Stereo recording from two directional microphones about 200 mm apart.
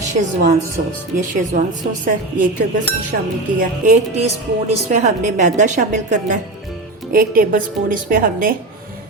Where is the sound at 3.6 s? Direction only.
35° right (ahead or behind).